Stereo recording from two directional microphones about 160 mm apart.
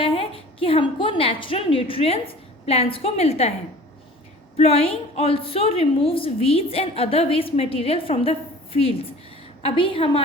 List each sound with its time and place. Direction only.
0.0 s a woman's voice: 35° left (ahead or behind)
4.5 s a woman's voice: 40° left (ahead or behind)